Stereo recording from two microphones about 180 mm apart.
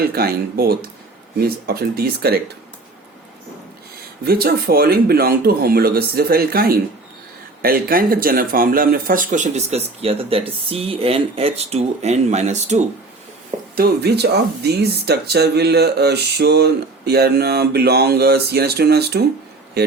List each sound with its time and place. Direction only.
0.0 s speech: 55° right (ahead or behind)
4.2 s speech: 60° right (ahead or behind); by 12.8 s 40° right (ahead or behind)
13.7 s speech: 60° right (ahead or behind)